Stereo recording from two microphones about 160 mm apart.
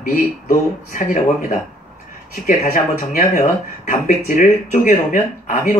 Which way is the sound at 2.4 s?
55° left (ahead or behind).